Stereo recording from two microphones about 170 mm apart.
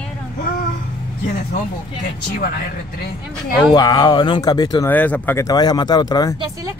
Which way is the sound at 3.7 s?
25° left (ahead or behind).